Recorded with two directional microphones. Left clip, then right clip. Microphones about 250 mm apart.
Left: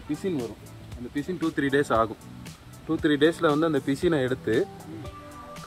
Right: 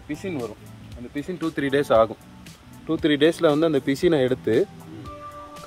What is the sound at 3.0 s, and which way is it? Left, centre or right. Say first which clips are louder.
Speech: right 3 dB; right.